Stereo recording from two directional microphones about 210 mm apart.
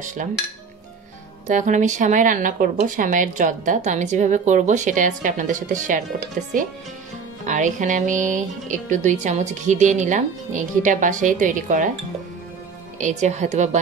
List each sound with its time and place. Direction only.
0.2 s speech: 40° right (ahead or behind)
1.5 s speech: 35° right (ahead or behind)
13.0 s speech: 35° right (ahead or behind)